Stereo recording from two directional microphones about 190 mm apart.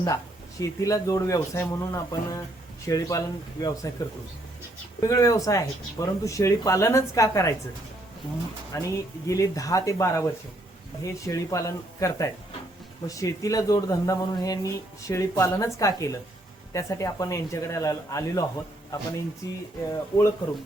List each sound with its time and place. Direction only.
0.6 s speech: 15° left (ahead or behind)
4.9 s speech: 20° left (ahead or behind)
8.7 s speech: 15° left (ahead or behind)